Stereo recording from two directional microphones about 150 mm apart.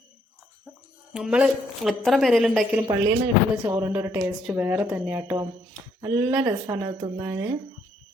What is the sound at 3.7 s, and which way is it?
Speech, 15° right (ahead or behind).